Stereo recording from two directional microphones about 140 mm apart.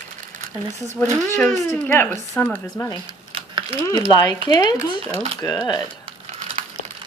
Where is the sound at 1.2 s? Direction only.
10° left (ahead or behind).